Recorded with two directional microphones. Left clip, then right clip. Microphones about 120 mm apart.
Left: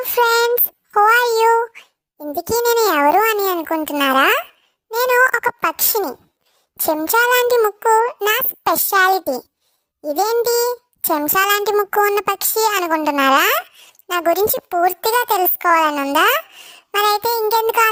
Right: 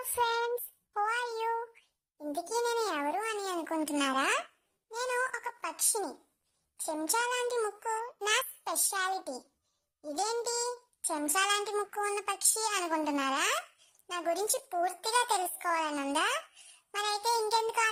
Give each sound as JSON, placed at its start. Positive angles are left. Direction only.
{"t": 0.2, "sound": "child singing", "side_deg": 50}
{"t": 4.9, "sound": "a child's voice", "side_deg": 50}
{"t": 10.4, "sound": "a sound", "side_deg": 55}
{"t": 11.3, "sound": "a child's voice", "side_deg": 55}